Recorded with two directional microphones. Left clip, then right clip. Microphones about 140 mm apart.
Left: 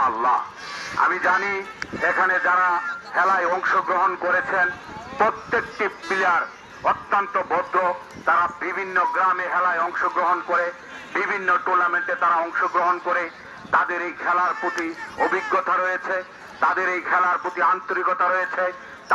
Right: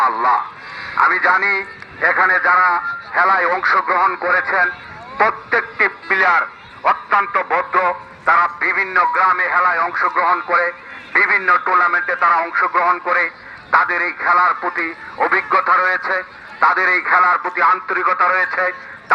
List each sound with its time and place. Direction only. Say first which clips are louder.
0.0 s speech: right 5 dB; 20° right (ahead or behind)